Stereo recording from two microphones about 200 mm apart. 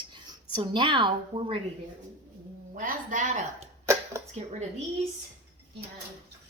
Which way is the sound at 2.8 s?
40° right (ahead or behind).